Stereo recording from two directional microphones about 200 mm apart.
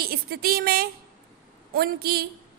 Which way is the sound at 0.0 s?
50° right (ahead or behind).